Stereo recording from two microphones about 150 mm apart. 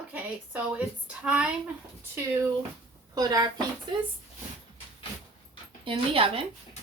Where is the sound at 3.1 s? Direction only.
25° right (ahead or behind).